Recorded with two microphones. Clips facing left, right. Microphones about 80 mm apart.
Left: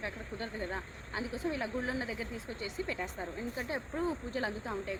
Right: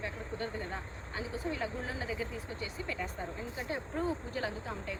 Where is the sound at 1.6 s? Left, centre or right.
Left.